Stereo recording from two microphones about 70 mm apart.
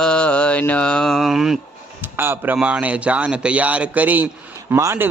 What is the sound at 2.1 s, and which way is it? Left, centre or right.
Speech, right.